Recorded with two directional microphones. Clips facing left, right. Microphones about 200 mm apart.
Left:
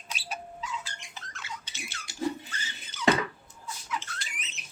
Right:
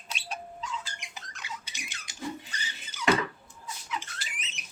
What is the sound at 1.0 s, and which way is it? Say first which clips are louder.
Rodents: even; 15° right (ahead or behind).